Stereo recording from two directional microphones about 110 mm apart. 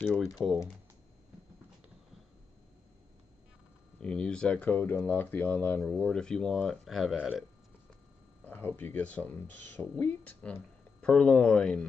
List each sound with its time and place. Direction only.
0.4 s speech: 5° right (ahead or behind)
4.0 s speech: 5° left (ahead or behind)
8.5 s speech: 15° left (ahead or behind)